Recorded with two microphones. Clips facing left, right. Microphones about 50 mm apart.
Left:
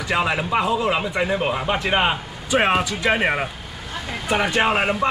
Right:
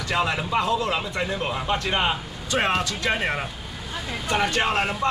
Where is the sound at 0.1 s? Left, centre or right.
Centre.